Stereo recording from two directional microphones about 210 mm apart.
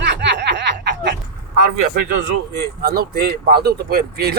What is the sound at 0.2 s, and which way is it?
Snicker, 55° right (ahead or behind).